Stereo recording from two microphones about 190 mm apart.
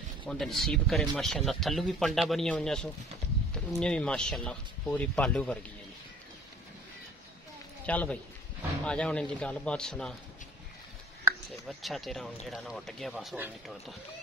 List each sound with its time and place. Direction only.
0.3 s speech: centre (ahead or behind)
7.8 s a man's voice: 5° left (ahead or behind)
11.6 s speech: centre (ahead or behind)